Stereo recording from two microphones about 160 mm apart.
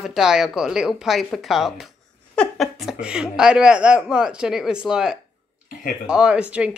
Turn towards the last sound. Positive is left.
turn(degrees=-5)  # may be behind; listen again after turning